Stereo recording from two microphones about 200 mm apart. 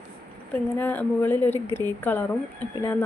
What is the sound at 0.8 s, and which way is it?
A woman's voice, 10° left (ahead or behind).